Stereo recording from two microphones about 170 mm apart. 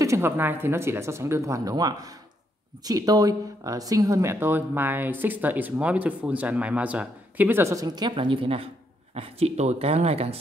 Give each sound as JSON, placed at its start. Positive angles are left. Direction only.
{"t": 0.0, "sound": "speech", "side_deg": -15}